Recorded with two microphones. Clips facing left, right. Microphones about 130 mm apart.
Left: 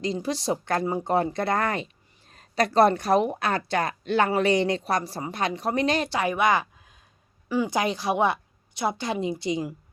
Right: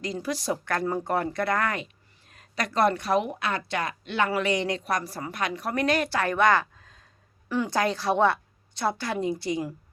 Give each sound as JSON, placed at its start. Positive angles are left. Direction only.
{"t": 0.0, "sound": "a woman's voice", "side_deg": 25}
{"t": 0.9, "sound": "speech", "side_deg": 15}
{"t": 1.1, "sound": "a woman's voice", "side_deg": 25}
{"t": 7.4, "sound": "a sound", "side_deg": 0}
{"t": 7.7, "sound": "a woman's voice", "side_deg": 15}